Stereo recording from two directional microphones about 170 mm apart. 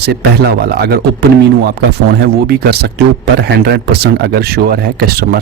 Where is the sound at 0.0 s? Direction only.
75° right (ahead or behind).